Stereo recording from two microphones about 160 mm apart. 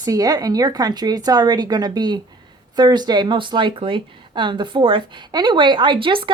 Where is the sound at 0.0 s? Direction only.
25° right (ahead or behind).